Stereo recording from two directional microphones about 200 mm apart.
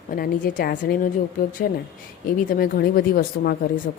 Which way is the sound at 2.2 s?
45° left (ahead or behind).